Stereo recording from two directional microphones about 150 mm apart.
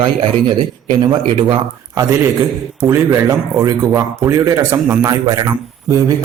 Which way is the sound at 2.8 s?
20° right (ahead or behind).